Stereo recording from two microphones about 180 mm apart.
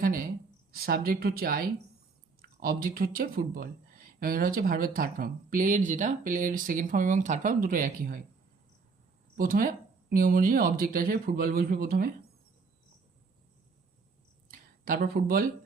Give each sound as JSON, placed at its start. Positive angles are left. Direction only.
{"t": 0.0, "sound": "a woman's voice", "side_deg": -50}
{"t": 9.4, "sound": "speech", "side_deg": -50}
{"t": 14.5, "sound": "a sound", "side_deg": -50}